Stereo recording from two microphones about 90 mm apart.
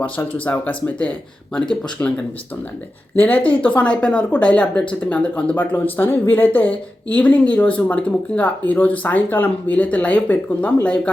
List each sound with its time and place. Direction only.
0.2 s speech: 20° left (ahead or behind)
3.2 s speech: 20° left (ahead or behind)